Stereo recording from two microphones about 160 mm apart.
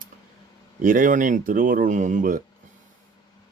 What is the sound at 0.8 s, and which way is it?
Speech, 55° right (ahead or behind).